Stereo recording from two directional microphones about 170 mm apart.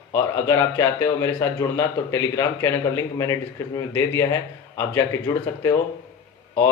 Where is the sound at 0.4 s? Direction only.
15° left (ahead or behind).